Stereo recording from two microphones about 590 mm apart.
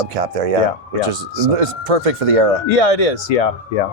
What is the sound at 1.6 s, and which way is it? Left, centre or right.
Speech, right.